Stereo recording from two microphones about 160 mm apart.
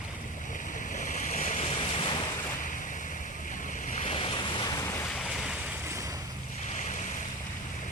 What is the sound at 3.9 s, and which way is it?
Waves, 40° left (ahead or behind).